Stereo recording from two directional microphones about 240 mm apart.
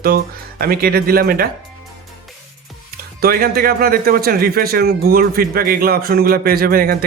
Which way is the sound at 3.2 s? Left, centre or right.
Right.